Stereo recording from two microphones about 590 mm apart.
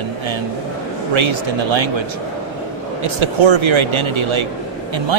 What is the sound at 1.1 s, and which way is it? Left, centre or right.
Speech, right.